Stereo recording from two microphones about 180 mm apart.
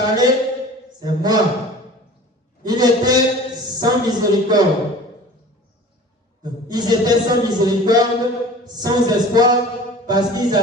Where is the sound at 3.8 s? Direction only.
25° right (ahead or behind).